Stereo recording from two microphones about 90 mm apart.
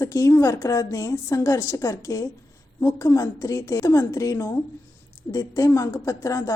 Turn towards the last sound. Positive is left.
turn(degrees=35)  # may be behind; listen again after turning